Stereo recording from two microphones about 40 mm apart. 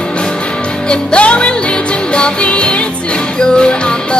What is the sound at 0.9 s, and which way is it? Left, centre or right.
Music, left.